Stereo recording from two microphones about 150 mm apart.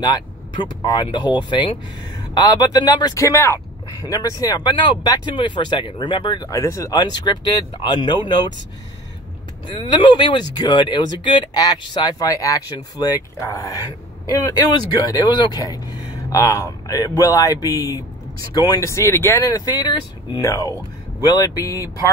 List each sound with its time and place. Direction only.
0.0 s speech: 30° left (ahead or behind)
9.8 s speech: 30° left (ahead or behind)